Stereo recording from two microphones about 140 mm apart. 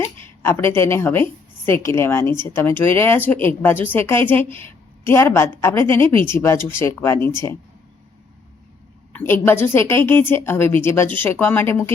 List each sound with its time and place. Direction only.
0.4 s a woman's voice: 15° left (ahead or behind)
9.1 s a woman's voice: 15° left (ahead or behind)